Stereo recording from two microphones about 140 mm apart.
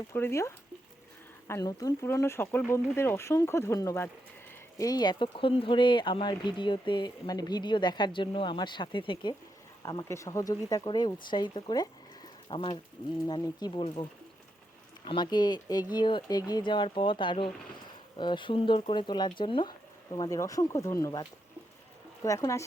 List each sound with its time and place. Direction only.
0.1 s speech: 20° left (ahead or behind)
15.0 s speech: 35° left (ahead or behind)
20.1 s speech: 25° left (ahead or behind)